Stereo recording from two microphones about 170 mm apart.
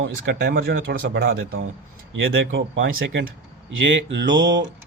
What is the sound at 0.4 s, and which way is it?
Speech, 65° right (ahead or behind).